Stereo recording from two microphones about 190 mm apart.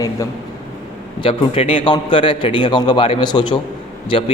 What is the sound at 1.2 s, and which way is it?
A man's voice, 30° left (ahead or behind).